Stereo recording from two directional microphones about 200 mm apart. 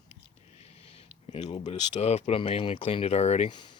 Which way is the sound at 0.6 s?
30° left (ahead or behind).